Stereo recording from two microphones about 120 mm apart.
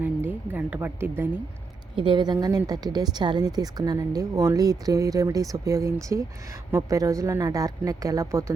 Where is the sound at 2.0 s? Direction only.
40° right (ahead or behind).